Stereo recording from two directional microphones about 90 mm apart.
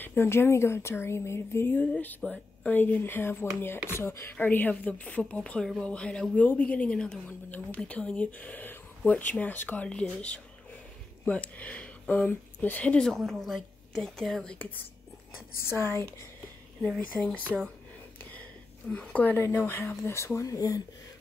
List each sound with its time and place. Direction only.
0.0 s speech: 25° left (ahead or behind)
4.4 s a woman's voice: 20° left (ahead or behind)
13.0 s speech: 5° left (ahead or behind)
15.6 s speech: 30° left (ahead or behind)
16.8 s speech: 5° left (ahead or behind)
18.9 s speech: 15° left (ahead or behind); by 20.8 s 40° left (ahead or behind)